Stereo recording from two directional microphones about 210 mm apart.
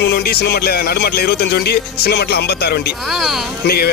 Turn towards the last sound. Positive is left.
turn(degrees=50)  # may be behind; listen again after turning